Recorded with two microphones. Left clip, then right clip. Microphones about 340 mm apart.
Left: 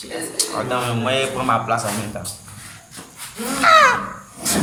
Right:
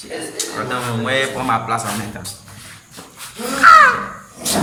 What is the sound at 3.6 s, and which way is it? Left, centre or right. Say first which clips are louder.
Speech: right 4 dB; centre.